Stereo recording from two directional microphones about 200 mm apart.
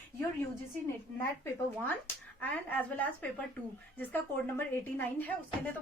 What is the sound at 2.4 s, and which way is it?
A woman's voice, 10° left (ahead or behind).